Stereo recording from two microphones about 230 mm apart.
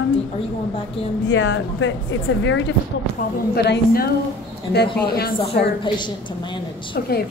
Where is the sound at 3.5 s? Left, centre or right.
Left.